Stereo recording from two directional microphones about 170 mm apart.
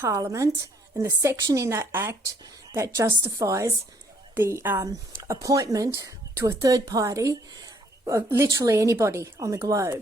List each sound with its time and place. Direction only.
0.0 s a woman's voice: 20° right (ahead or behind)